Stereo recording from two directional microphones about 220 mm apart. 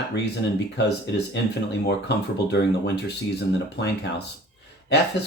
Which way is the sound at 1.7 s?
50° left (ahead or behind).